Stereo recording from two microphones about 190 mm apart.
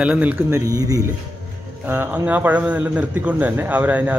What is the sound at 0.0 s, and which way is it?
Speech, 5° right (ahead or behind).